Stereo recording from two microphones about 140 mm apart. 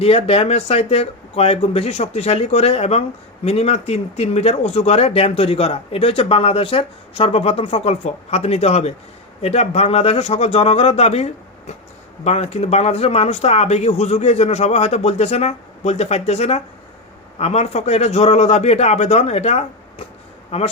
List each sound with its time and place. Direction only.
0.0 s speech: 45° left (ahead or behind)